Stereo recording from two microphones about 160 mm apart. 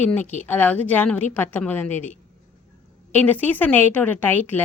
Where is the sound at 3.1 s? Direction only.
10° left (ahead or behind).